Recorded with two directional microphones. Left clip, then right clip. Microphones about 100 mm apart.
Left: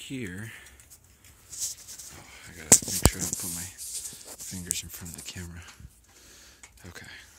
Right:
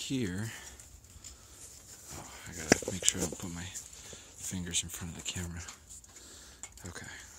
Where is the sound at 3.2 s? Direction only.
Centre (ahead or behind).